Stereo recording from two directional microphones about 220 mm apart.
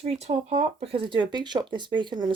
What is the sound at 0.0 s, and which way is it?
Speech, 30° right (ahead or behind).